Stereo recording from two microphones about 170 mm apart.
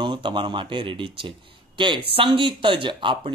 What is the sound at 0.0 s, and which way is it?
Speech, 30° right (ahead or behind).